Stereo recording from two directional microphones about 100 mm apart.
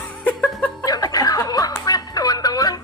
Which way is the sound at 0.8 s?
40° left (ahead or behind).